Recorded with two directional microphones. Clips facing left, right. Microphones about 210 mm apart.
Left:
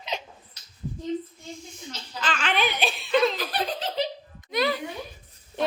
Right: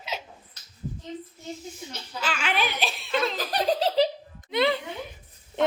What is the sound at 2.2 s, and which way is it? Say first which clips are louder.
Giggle: left 2 dB; 10° right (ahead or behind).